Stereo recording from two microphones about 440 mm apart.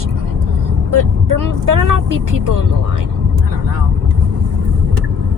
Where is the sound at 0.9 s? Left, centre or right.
Right.